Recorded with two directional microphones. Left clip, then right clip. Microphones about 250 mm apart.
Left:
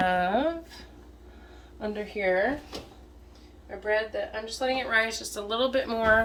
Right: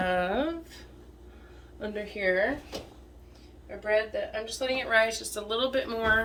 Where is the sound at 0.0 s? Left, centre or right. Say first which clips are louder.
Left 3 dB; centre.